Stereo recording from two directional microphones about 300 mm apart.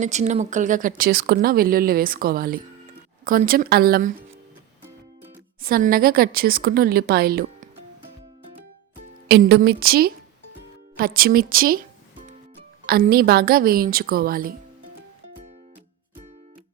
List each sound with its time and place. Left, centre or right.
0.0 s speech: right
5.6 s speech: right
9.3 s a woman's voice: right
12.8 s speech: right